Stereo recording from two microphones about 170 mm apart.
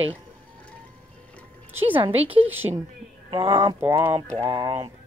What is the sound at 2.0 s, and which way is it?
Speech, 35° right (ahead or behind).